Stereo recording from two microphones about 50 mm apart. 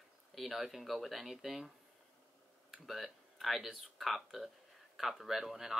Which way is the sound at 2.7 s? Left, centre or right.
Centre.